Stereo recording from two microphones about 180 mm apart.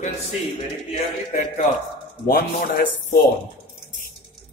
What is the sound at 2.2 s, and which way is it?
Speech, 55° left (ahead or behind).